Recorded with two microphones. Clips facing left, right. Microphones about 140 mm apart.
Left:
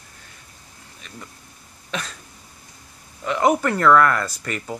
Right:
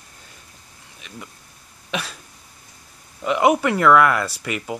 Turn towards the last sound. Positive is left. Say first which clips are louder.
# right 2 dB
turn(degrees=-10)  # may be behind; listen again after turning